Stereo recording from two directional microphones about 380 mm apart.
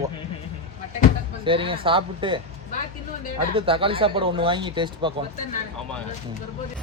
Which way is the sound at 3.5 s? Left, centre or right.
Centre.